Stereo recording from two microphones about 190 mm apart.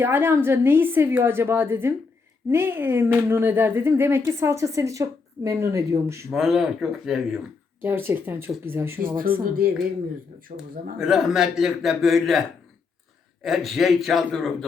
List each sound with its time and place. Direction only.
0.0 s speech: 10° right (ahead or behind)
6.3 s speech: centre (ahead or behind)
9.0 s speech: 50° right (ahead or behind)
10.9 s speech: centre (ahead or behind)
13.4 s speech: centre (ahead or behind)